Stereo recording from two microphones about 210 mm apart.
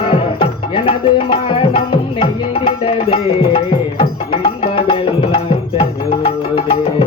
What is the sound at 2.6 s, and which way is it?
Music, 25° left (ahead or behind).